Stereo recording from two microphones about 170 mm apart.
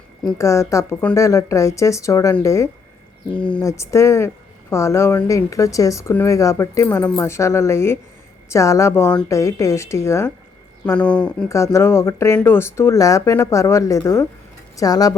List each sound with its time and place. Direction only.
0.3 s speech: 15° left (ahead or behind)
3.3 s speech: 5° left (ahead or behind)
3.6 s speech: 15° left (ahead or behind)
11.4 s speech: 15° left (ahead or behind)